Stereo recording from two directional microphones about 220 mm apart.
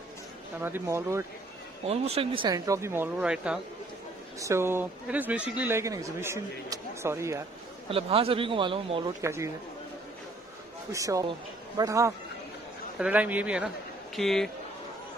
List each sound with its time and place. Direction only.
0.6 s speech: 10° right (ahead or behind)
1.9 s speech: 25° right (ahead or behind)
7.9 s speech: 25° right (ahead or behind)
9.2 s speech: 15° right (ahead or behind)
10.9 s speech: 15° right (ahead or behind); by 14.5 s centre (ahead or behind)